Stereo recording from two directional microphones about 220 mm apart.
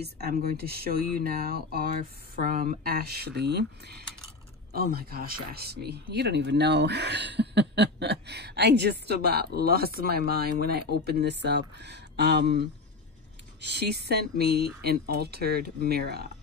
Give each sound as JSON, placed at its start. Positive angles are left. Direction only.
{"t": 0.2, "sound": "speech", "side_deg": -45}